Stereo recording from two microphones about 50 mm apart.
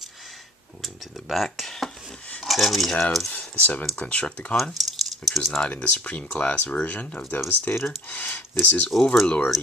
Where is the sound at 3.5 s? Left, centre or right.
Left.